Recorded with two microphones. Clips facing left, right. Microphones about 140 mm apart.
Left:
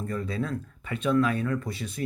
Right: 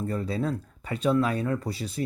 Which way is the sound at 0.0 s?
30° right (ahead or behind).